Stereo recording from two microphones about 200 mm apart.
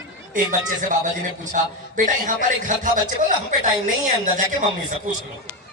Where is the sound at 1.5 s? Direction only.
40° right (ahead or behind).